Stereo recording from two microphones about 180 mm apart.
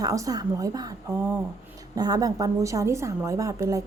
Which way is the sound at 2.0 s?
20° right (ahead or behind).